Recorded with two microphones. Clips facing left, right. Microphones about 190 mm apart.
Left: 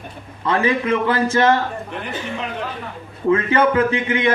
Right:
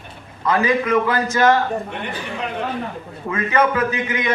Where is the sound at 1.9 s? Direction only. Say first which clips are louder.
Left 1 dB; centre (ahead or behind).